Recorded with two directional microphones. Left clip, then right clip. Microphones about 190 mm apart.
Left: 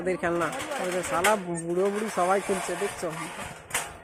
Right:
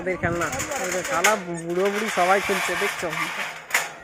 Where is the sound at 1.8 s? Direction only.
30° right (ahead or behind).